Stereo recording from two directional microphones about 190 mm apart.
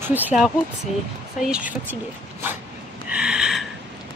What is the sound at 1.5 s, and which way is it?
Speech, 10° right (ahead or behind).